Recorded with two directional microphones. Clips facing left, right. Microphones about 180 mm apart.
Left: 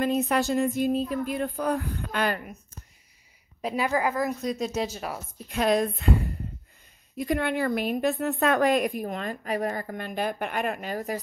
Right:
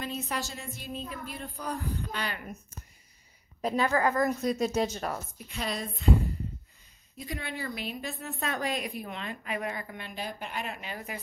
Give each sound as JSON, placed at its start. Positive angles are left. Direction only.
{"t": 0.0, "sound": "a woman's voice", "side_deg": 60}
{"t": 1.4, "sound": "speech", "side_deg": 70}
{"t": 3.6, "sound": "speech", "side_deg": 10}
{"t": 5.5, "sound": "speech", "side_deg": 55}
{"t": 7.2, "sound": "a woman's voice", "side_deg": 60}